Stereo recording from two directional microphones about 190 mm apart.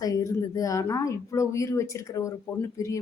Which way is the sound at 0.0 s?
15° left (ahead or behind).